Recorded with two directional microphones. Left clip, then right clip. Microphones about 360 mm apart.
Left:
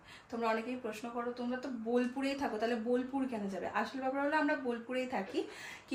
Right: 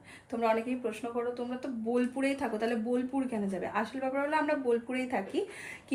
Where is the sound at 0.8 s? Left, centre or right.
Centre.